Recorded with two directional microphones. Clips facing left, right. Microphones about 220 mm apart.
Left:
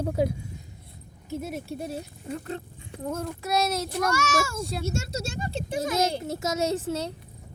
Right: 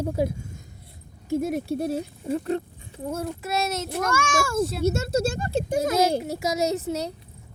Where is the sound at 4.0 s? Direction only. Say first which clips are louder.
Right 1 dB; 50° right (ahead or behind).